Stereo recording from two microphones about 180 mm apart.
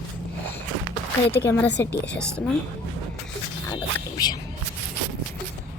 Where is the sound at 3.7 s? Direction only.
20° left (ahead or behind).